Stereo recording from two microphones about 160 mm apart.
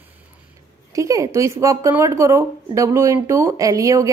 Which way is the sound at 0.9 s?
20° right (ahead or behind).